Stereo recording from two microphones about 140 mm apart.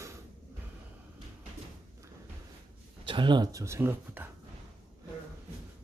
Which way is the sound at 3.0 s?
35° right (ahead or behind).